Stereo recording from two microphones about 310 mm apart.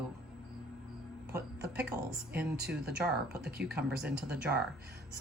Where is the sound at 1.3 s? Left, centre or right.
Centre.